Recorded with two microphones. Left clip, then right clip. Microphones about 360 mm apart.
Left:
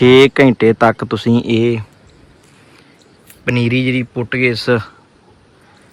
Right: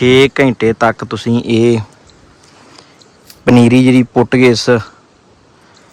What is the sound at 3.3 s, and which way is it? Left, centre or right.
Speech, centre.